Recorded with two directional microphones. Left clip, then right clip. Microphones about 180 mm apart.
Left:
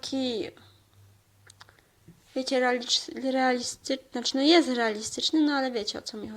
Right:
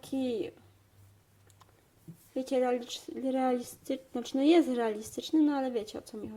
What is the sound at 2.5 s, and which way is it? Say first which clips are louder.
Speech: left 5 dB; 5° left (ahead or behind).